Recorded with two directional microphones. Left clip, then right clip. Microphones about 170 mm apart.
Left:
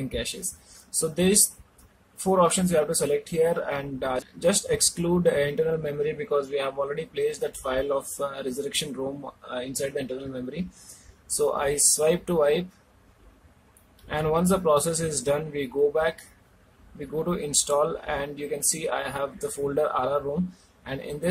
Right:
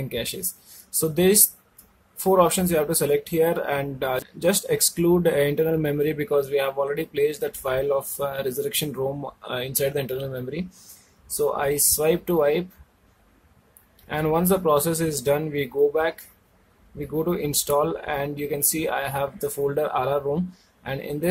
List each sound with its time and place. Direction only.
0.1 s speech: 25° right (ahead or behind)
11.3 s speech: 15° right (ahead or behind)
14.0 s speech: 20° right (ahead or behind)
17.2 s speech: 20° right (ahead or behind)